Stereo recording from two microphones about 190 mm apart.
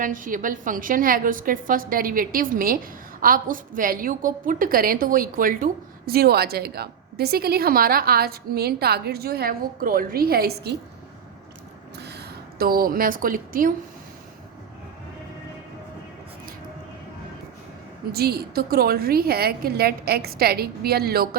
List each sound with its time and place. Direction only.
0.0 s a woman's voice: 45° right (ahead or behind)
11.9 s a woman's voice: 60° right (ahead or behind)
18.1 s a woman's voice: 55° right (ahead or behind)